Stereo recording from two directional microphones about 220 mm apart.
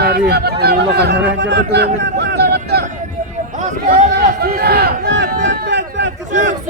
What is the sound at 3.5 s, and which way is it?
Speech, 35° right (ahead or behind).